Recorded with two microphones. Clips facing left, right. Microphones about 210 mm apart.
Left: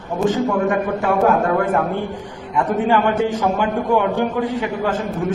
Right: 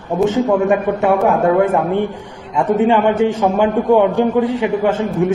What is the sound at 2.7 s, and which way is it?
A man's voice, 25° right (ahead or behind).